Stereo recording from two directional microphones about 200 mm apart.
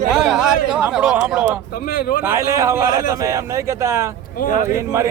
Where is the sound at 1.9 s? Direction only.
45° left (ahead or behind).